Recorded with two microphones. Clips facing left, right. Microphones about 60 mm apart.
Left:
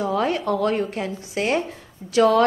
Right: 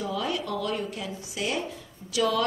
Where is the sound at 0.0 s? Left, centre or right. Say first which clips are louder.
Left 8 dB; left.